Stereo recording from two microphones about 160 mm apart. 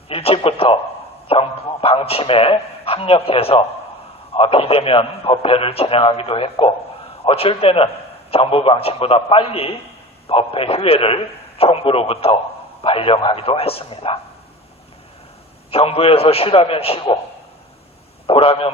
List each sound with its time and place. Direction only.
0.1 s a man's voice: 40° left (ahead or behind)
15.7 s a man's voice: 35° left (ahead or behind)
18.3 s a man's voice: 35° left (ahead or behind)